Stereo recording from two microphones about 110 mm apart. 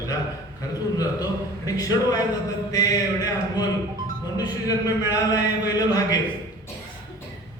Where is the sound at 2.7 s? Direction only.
35° left (ahead or behind).